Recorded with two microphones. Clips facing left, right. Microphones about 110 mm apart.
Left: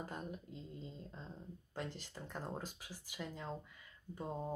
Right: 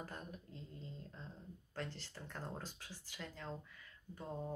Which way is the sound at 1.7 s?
15° left (ahead or behind).